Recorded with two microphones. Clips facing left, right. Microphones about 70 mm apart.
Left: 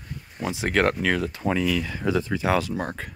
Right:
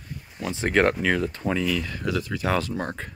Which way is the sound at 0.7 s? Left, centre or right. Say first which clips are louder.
Right 1 dB; centre.